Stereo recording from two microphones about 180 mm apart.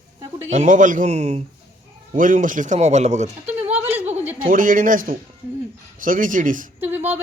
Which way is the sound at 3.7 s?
10° right (ahead or behind).